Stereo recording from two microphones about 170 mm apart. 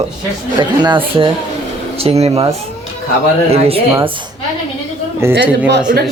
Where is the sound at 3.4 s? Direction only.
35° right (ahead or behind).